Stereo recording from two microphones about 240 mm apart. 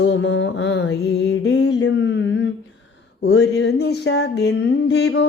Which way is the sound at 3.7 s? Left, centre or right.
Left.